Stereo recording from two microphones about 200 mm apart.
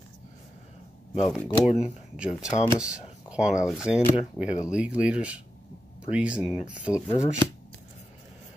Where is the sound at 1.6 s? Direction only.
35° left (ahead or behind).